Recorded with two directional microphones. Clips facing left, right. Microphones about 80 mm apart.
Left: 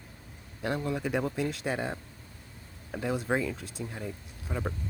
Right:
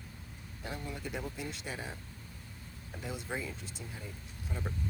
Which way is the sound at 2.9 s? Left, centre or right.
Left.